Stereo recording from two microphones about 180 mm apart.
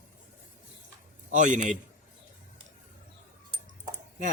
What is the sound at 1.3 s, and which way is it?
Speech, 40° right (ahead or behind).